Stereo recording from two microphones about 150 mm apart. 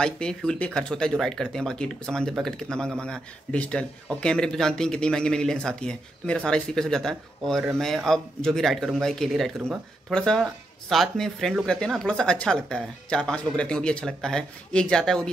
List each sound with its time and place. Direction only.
0.0 s speech: 5° left (ahead or behind)